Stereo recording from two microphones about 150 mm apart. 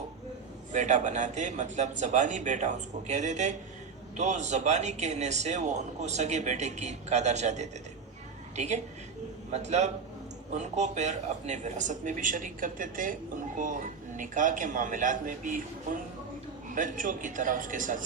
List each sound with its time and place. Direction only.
0.7 s a woman's voice: 55° right (ahead or behind)
16.6 s speech: 60° right (ahead or behind)